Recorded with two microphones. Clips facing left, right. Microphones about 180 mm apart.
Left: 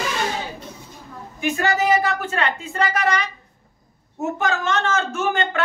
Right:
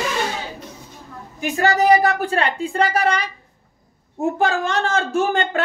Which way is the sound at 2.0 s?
35° right (ahead or behind).